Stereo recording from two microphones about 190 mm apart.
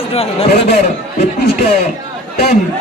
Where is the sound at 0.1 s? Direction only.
30° left (ahead or behind).